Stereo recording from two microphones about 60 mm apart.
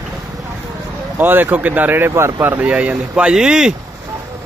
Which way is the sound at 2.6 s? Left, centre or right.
Right.